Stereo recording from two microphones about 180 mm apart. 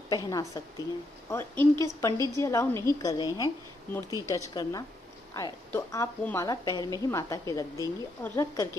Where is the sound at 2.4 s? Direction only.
15° left (ahead or behind).